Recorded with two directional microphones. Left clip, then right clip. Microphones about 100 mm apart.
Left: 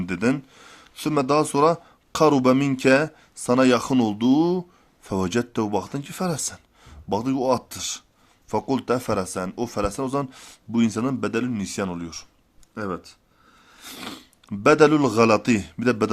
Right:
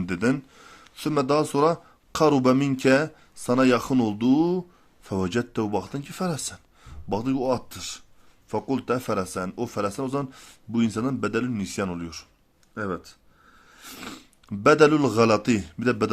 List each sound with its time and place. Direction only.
0.0 s speech: 15° left (ahead or behind)
13.7 s a sound: 25° left (ahead or behind)
14.4 s speech: 20° left (ahead or behind)